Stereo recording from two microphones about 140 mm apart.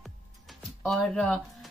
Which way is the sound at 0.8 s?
Centre (ahead or behind).